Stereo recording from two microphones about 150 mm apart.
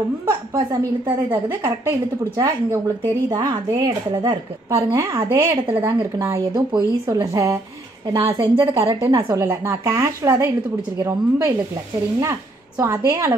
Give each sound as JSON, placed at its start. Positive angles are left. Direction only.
{"t": 0.3, "sound": "a woman's voice", "side_deg": -20}